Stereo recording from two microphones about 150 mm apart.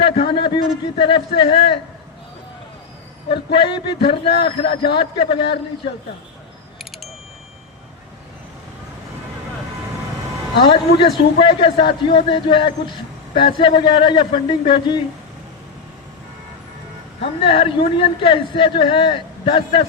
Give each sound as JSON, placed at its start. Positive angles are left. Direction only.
{"t": 0.0, "sound": "speech", "side_deg": 35}
{"t": 3.5, "sound": "speech", "side_deg": 35}
{"t": 10.6, "sound": "speech", "side_deg": 35}
{"t": 17.4, "sound": "speech", "side_deg": 40}